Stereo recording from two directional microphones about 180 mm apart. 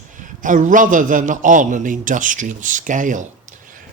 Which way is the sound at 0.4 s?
45° right (ahead or behind).